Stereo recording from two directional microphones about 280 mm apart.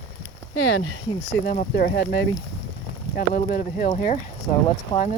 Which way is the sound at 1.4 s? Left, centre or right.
Left.